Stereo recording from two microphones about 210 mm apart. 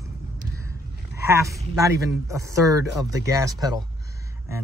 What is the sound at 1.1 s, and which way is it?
Speech, 15° right (ahead or behind).